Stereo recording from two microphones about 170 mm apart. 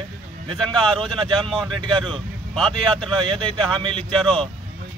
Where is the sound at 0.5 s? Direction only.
30° right (ahead or behind).